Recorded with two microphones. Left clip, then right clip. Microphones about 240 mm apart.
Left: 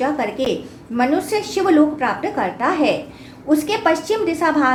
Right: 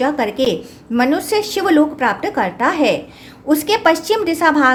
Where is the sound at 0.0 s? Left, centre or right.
Right.